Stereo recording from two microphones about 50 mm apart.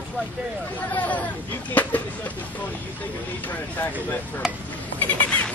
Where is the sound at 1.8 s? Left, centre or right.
Left.